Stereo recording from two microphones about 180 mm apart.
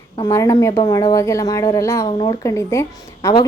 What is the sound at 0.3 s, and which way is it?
A woman's voice, 15° left (ahead or behind).